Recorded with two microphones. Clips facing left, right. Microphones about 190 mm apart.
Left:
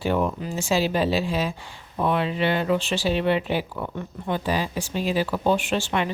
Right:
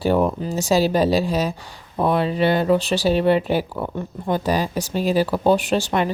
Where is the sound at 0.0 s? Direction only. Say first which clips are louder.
Right 5 dB; 35° right (ahead or behind).